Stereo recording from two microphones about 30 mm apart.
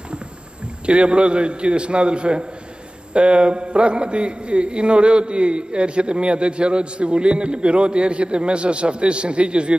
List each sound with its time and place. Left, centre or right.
0.8 s a man's voice: right